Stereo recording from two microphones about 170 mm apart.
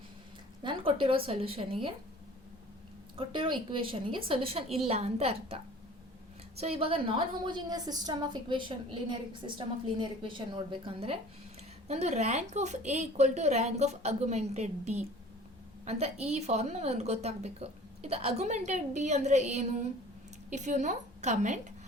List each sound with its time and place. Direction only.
0.6 s a woman's voice: 30° right (ahead or behind)
3.2 s a woman's voice: 30° right (ahead or behind)
6.6 s a woman's voice: 35° right (ahead or behind)